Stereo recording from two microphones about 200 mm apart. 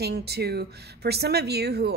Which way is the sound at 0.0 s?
55° right (ahead or behind).